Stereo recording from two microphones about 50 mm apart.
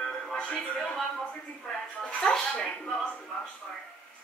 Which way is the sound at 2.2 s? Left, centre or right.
Centre.